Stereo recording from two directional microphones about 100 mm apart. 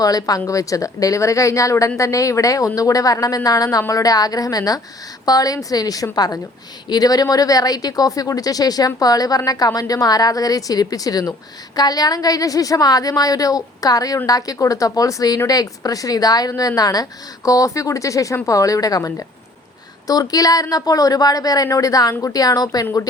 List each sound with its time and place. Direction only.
0.0 s speech: 40° left (ahead or behind)